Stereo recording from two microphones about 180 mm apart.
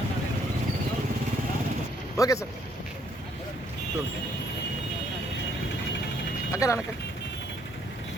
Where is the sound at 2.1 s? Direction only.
20° left (ahead or behind).